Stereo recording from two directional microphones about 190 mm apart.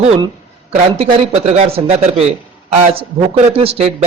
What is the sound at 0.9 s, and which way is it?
Speech, 30° right (ahead or behind).